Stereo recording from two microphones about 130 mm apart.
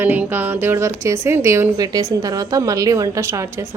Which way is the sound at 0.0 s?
15° right (ahead or behind).